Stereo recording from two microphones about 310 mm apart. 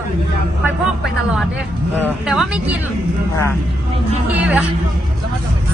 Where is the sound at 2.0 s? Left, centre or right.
Centre.